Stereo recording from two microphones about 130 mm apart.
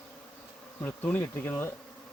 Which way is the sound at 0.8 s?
10° left (ahead or behind).